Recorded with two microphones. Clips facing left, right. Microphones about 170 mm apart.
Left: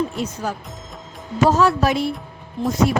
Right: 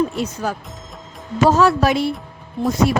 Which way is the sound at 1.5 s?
80° right.